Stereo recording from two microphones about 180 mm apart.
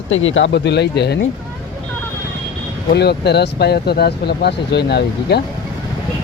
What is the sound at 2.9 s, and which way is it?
Speech, 65° left (ahead or behind).